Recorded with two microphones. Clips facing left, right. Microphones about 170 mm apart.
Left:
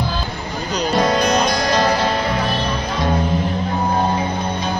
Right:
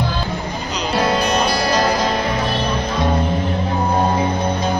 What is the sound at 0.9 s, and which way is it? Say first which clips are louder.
Music: left 1 dB; 5° right (ahead or behind).